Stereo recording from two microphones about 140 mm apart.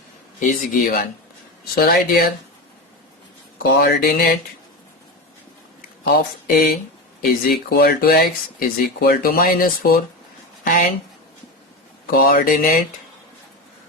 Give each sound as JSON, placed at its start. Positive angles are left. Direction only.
{"t": 0.3, "sound": "speech", "side_deg": 65}
{"t": 1.7, "sound": "speech", "side_deg": 90}
{"t": 3.6, "sound": "speech", "side_deg": 90}
{"t": 6.1, "sound": "speech", "side_deg": 90}
{"t": 10.6, "sound": "speech", "side_deg": 80}
{"t": 12.1, "sound": "speech", "side_deg": 80}